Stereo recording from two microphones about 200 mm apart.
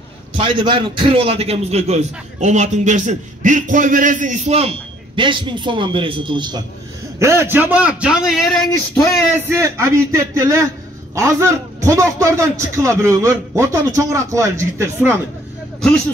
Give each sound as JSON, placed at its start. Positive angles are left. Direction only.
{"t": 0.4, "sound": "a man's voice", "side_deg": -25}
{"t": 9.3, "sound": "a man's voice", "side_deg": -10}